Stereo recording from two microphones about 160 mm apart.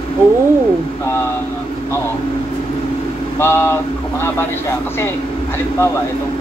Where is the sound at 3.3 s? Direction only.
15° left (ahead or behind).